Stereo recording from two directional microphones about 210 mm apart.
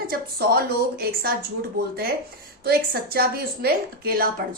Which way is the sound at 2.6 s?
45° right (ahead or behind).